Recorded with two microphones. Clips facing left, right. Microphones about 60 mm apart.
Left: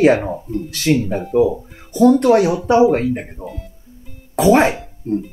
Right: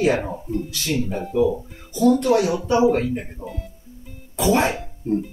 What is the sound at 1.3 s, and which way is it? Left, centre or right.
Speech, left.